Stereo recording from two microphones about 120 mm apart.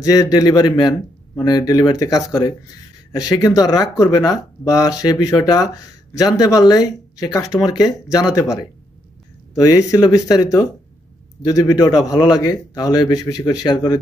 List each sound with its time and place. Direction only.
0.0 s speech: 30° left (ahead or behind)
9.6 s speech: 30° left (ahead or behind)